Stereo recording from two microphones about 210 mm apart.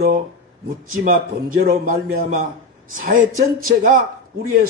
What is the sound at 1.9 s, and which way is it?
Speech, 40° right (ahead or behind).